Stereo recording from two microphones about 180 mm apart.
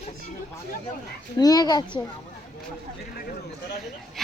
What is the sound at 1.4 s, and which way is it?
Speech, 20° left (ahead or behind).